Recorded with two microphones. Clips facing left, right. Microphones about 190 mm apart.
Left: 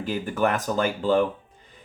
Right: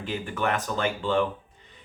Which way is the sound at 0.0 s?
40° left (ahead or behind).